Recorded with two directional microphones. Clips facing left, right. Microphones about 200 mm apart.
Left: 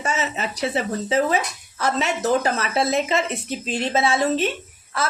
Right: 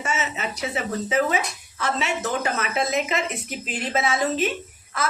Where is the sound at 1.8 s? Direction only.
40° left (ahead or behind).